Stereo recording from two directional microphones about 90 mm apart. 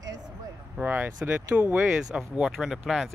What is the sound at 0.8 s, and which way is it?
Speech, 20° right (ahead or behind).